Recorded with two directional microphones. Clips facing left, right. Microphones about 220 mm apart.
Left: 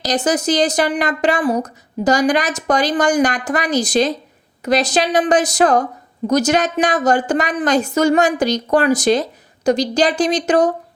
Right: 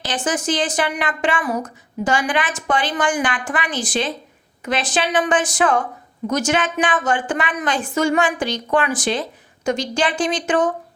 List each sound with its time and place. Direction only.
0.0 s a woman's voice: 40° left (ahead or behind)